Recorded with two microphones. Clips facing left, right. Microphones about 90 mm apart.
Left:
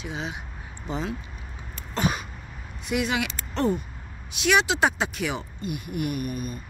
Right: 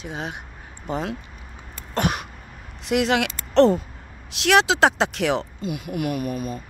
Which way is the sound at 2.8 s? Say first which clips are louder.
Right 5 dB; 80° right.